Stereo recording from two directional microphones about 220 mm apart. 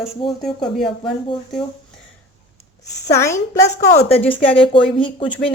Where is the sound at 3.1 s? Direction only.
15° left (ahead or behind).